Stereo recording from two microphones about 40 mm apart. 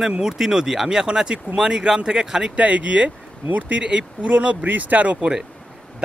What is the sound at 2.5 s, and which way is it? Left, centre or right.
Speech, right.